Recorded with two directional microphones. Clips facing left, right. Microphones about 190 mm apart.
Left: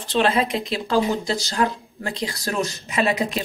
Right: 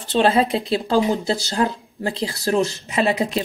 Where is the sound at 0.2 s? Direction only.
35° right (ahead or behind).